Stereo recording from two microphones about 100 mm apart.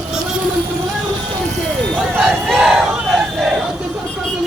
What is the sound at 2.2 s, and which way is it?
Crowd, centre (ahead or behind).